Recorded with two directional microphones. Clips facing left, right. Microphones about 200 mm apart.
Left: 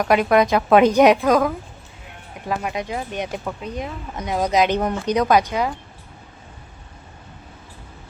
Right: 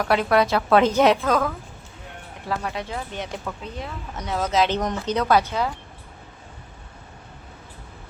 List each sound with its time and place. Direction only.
0.0 s speech: 15° left (ahead or behind)